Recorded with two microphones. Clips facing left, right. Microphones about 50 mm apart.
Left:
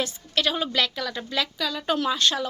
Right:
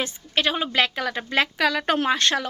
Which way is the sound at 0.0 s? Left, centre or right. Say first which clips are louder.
Right 1 dB; right.